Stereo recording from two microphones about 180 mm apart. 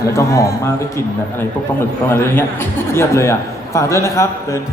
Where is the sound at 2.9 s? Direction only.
15° left (ahead or behind).